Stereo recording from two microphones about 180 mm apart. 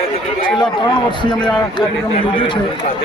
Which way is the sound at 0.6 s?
25° left (ahead or behind).